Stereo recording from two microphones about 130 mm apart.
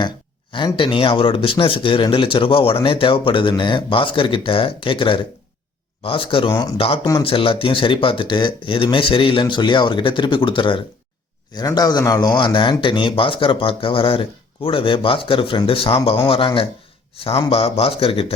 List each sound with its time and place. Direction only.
0.5 s speech: 40° left (ahead or behind)